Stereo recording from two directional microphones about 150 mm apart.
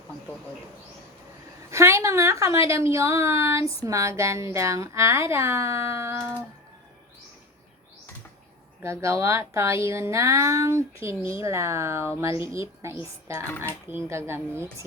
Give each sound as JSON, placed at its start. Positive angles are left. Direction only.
{"t": 1.7, "sound": "a woman's voice", "side_deg": -20}
{"t": 8.8, "sound": "a woman's voice", "side_deg": -20}